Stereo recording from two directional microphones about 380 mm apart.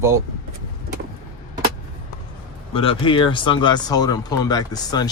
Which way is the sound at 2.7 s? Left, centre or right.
Centre.